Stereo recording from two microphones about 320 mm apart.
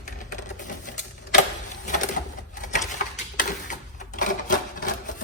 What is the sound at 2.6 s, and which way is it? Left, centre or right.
Typewriter, left.